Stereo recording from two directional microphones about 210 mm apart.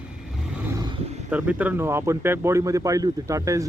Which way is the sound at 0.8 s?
25° right (ahead or behind).